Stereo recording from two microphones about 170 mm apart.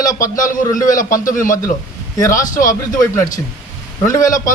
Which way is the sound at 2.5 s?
50° left (ahead or behind).